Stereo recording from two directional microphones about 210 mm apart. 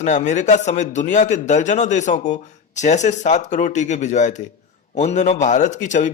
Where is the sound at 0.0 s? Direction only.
35° left (ahead or behind).